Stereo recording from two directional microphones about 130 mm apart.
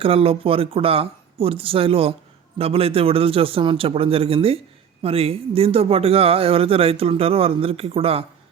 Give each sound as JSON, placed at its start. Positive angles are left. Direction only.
{"t": 0.0, "sound": "speech", "side_deg": -45}